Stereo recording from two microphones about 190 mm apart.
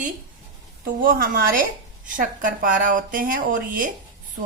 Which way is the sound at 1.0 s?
45° right (ahead or behind).